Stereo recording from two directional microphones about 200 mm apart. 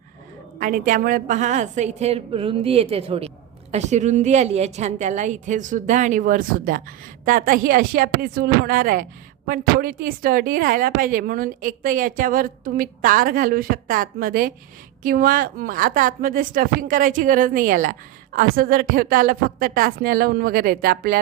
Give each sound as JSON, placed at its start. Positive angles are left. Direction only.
{"t": 0.6, "sound": "a woman's voice", "side_deg": -40}